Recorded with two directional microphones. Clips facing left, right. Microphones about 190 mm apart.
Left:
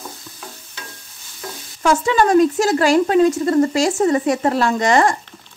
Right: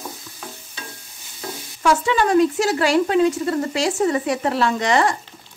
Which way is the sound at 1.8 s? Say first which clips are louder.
Left 2 dB; 45° left (ahead or behind).